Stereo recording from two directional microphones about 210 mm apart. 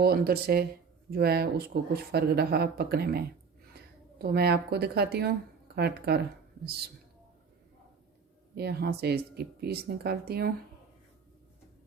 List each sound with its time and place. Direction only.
0.0 s a woman's voice: 45° right (ahead or behind)
8.5 s speech: 50° right (ahead or behind)